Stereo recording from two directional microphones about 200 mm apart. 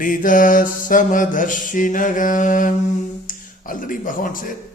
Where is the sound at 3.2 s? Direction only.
40° left (ahead or behind).